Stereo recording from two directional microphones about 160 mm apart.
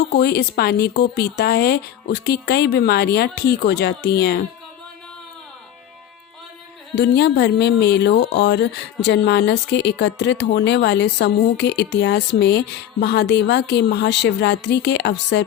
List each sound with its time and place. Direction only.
0.1 s speech: 90° left
6.9 s speech: 90° left